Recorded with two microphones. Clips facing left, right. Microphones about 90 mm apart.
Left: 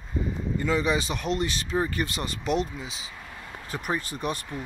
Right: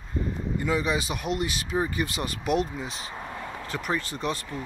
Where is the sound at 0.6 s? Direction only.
10° right (ahead or behind).